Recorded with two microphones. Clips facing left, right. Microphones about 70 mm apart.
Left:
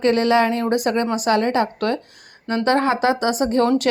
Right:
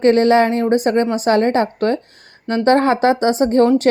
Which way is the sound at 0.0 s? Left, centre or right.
Right.